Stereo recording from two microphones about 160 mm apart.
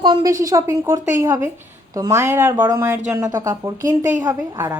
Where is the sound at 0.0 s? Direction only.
25° right (ahead or behind).